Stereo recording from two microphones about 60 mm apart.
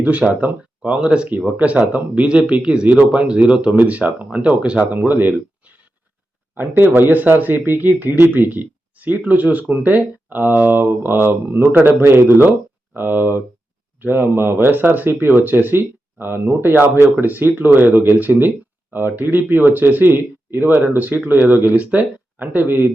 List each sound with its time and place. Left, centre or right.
0.0 s speech: right
4.9 s speech: right